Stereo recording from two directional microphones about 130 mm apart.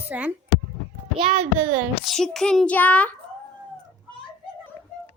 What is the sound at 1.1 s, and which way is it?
Speech, 45° right (ahead or behind).